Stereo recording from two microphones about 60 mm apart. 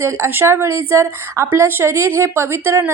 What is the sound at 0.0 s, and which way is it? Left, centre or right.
A woman's voice, right.